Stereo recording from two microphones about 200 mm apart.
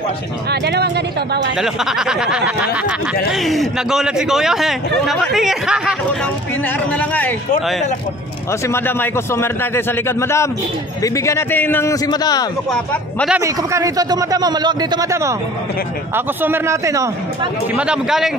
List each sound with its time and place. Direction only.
0.5 s speech: 55° right (ahead or behind)
1.6 s a man's voice: 5° right (ahead or behind)
7.0 s a man's voice: 10° left (ahead or behind)
8.6 s a man's voice: 10° left (ahead or behind)
12.7 s a man's voice: 5° left (ahead or behind)
13.4 s a man's voice: 15° right (ahead or behind)
16.4 s a man's voice: 10° right (ahead or behind)
17.8 s a man's voice: 5° right (ahead or behind)